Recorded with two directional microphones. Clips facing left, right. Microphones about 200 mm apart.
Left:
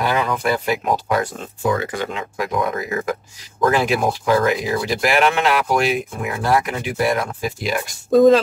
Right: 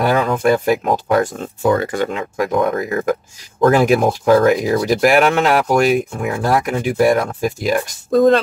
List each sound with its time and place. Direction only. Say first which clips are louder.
0.0 s speech: right 5 dB; 45° right (ahead or behind)
8.1 s speech: left 1 dB; centre (ahead or behind)